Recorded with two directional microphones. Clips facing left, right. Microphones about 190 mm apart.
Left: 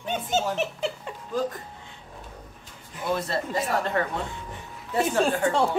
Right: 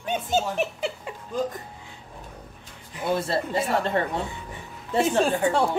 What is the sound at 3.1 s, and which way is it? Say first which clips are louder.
Speech: right 2 dB; 30° right (ahead or behind).